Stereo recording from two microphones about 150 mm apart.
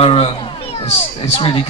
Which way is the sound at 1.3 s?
35° left (ahead or behind).